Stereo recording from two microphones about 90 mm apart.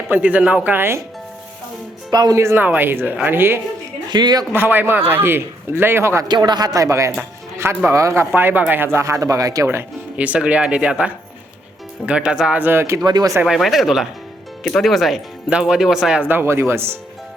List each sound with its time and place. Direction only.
0.1 s a man's voice: 15° right (ahead or behind)
2.0 s speech: 50° right (ahead or behind)
2.3 s a man's voice: 30° right (ahead or behind)
4.1 s speech: 50° right (ahead or behind)
4.5 s a man's voice: 20° right (ahead or behind)
6.2 s speech: 55° right (ahead or behind); by 7.1 s 35° right (ahead or behind)
7.2 s speech: 25° right (ahead or behind)
8.4 s speech: 20° right (ahead or behind); by 9.6 s 40° right (ahead or behind)
10.2 s speech: 15° right (ahead or behind)
12.6 s a man's voice: 25° right (ahead or behind)
13.1 s speech: 50° right (ahead or behind)
13.6 s speech: centre (ahead or behind)
16.2 s a man's voice: 25° right (ahead or behind)